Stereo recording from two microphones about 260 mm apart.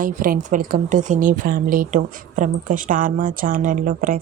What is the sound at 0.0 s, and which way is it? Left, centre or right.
Speech, right.